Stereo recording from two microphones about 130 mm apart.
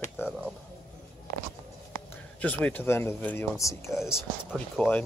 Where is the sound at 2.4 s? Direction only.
10° left (ahead or behind).